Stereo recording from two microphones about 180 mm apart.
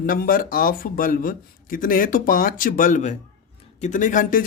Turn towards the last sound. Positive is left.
turn(degrees=45)  # may be behind; listen again after turning